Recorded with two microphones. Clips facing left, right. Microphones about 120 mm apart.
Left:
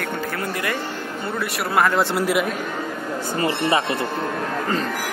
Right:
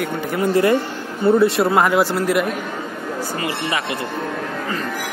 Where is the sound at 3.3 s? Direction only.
30° left (ahead or behind).